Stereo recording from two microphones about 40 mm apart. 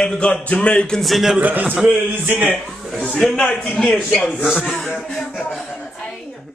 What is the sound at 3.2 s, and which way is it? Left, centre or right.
Speech, centre.